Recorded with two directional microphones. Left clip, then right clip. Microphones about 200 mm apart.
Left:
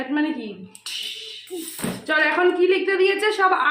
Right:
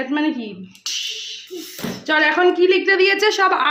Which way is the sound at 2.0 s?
45° right (ahead or behind).